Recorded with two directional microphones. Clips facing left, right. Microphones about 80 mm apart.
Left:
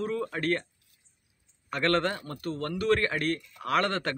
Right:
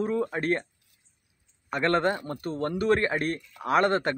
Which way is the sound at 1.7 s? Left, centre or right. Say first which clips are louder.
Right 2 dB; centre.